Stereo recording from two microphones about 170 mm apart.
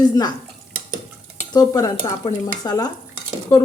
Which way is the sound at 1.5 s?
20° left (ahead or behind).